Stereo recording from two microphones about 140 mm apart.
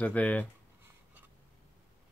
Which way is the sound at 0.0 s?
10° left (ahead or behind).